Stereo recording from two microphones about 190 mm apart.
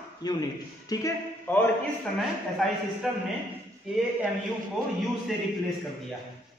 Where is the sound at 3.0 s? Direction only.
5° right (ahead or behind).